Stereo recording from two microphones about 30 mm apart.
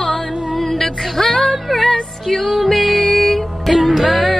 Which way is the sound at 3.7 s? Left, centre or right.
Centre.